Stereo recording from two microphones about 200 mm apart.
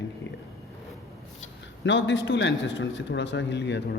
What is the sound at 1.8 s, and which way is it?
A man's voice, 65° left (ahead or behind).